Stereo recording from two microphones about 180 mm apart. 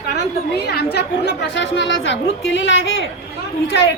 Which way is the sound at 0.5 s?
65° left (ahead or behind).